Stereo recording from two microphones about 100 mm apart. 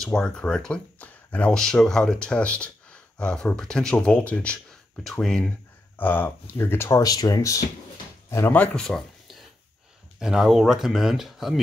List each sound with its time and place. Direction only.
0.0 s speech: 10° left (ahead or behind)
5.9 s speech: 20° left (ahead or behind)
7.0 s speech: 40° left (ahead or behind)
8.3 s speech: 25° left (ahead or behind)
8.5 s a sound: 5° left (ahead or behind)
10.1 s speech: 5° right (ahead or behind)